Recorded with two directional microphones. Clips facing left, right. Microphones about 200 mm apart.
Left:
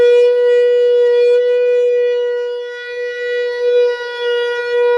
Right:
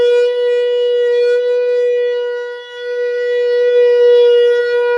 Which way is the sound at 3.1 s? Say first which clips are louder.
Right 5 dB; 35° right (ahead or behind).